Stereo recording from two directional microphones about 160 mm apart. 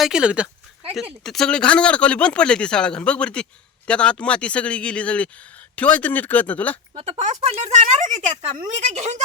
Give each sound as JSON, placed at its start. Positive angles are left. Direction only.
{"t": 0.0, "sound": "speech", "side_deg": -5}
{"t": 6.9, "sound": "speech", "side_deg": -45}